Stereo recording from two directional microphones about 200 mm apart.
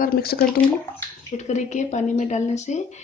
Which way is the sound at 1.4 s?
35° left (ahead or behind).